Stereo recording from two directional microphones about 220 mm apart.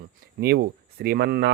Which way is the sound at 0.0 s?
45° right (ahead or behind).